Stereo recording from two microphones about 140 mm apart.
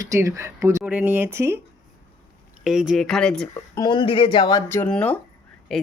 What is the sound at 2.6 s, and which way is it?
Speech, 5° right (ahead or behind).